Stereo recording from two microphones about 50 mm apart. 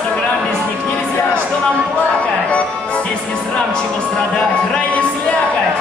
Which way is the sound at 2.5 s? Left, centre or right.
Left.